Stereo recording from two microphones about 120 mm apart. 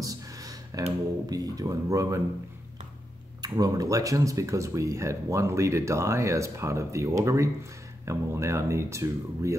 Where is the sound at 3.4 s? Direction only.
35° right (ahead or behind).